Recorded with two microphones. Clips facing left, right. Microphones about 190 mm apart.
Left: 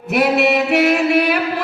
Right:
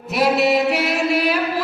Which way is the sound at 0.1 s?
65° left (ahead or behind).